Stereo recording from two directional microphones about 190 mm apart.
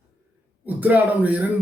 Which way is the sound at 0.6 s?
10° right (ahead or behind).